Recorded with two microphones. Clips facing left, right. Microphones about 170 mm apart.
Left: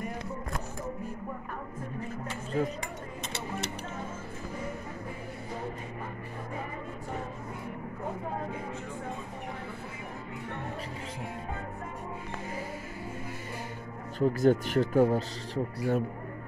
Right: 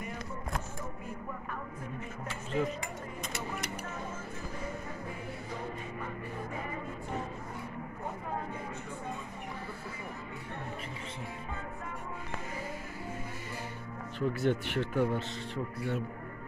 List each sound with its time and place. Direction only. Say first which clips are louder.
2.5 s speech: left 2 dB; 40° left (ahead or behind)
14.2 s speech: left 6 dB; 40° left (ahead or behind)